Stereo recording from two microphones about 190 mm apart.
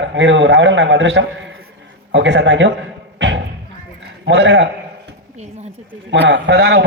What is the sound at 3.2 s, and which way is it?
Music, 70° right (ahead or behind).